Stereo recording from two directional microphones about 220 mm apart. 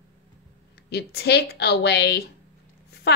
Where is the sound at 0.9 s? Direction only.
50° left (ahead or behind).